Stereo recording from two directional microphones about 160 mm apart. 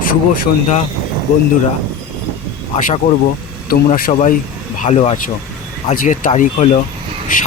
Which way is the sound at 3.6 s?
60° left (ahead or behind).